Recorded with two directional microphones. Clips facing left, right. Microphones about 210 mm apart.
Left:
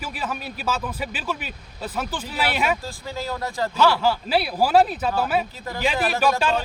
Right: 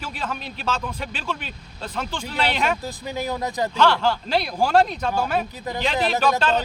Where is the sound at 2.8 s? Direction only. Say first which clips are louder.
Right 3 dB; 20° right (ahead or behind).